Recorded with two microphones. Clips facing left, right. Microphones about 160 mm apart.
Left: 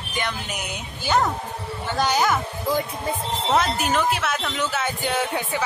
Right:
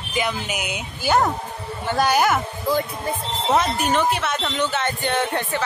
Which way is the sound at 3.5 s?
Centre (ahead or behind).